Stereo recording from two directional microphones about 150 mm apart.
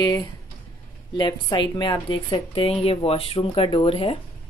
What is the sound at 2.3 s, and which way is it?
Speech, 40° left (ahead or behind).